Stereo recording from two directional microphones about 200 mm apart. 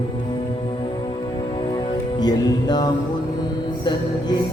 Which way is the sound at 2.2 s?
20° left (ahead or behind).